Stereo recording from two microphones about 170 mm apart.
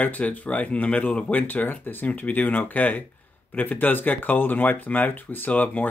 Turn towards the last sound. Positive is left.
turn(degrees=10)  # may be behind; listen again after turning